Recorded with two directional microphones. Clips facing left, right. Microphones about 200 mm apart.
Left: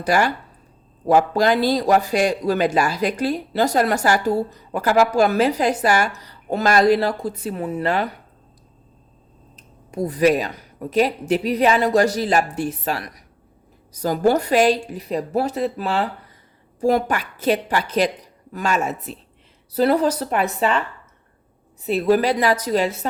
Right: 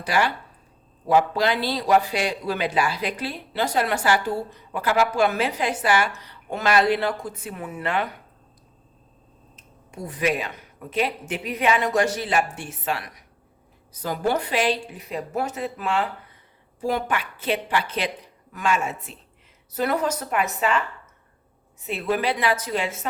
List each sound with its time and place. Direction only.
0.0 s speech: 45° left (ahead or behind)
9.6 s speech: 40° left (ahead or behind)
21.8 s speech: 35° left (ahead or behind)